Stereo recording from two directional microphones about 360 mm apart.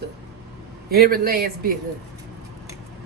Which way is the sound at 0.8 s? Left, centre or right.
Right.